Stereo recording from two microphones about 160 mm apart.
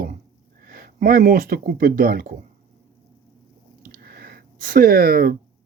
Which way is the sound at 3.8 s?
65° right (ahead or behind).